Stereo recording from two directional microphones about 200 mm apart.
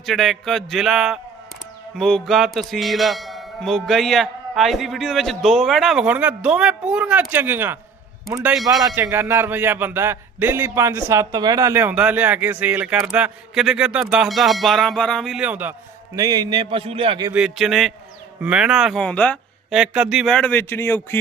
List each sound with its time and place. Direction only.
0.0 s music: centre (ahead or behind)
8.3 s speech: 15° right (ahead or behind)
16.1 s a man's voice: 15° right (ahead or behind)
17.3 s music: centre (ahead or behind)